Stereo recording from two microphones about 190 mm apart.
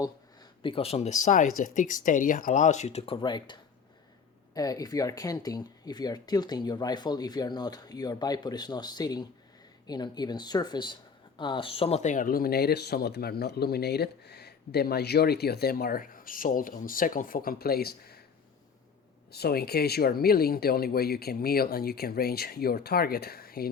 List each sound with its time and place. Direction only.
0.6 s speech: 30° left (ahead or behind); by 18.2 s 55° left (ahead or behind)
19.3 s speech: 55° left (ahead or behind)